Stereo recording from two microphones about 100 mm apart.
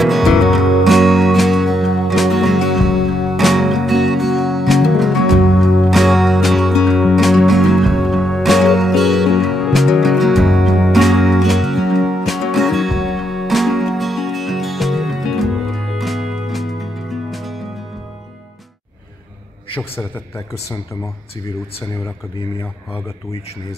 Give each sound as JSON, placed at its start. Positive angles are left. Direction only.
{"t": 0.0, "sound": "music", "side_deg": 0}
{"t": 19.8, "sound": "a man's voice", "side_deg": 25}